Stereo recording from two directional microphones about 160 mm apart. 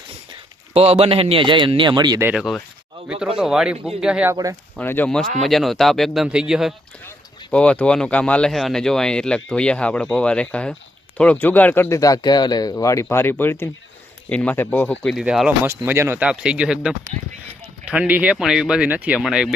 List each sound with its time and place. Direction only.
0.7 s a man's voice: 40° right (ahead or behind)
2.2 s speech: 5° right (ahead or behind)
4.8 s speech: 10° left (ahead or behind)
7.5 s speech: 5° left (ahead or behind)
15.1 s speech: 5° right (ahead or behind)